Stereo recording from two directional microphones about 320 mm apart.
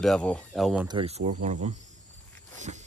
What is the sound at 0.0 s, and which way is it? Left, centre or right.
Speech, centre.